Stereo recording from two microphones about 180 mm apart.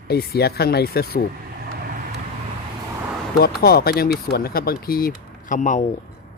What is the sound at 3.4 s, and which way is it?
Speech, 60° left (ahead or behind).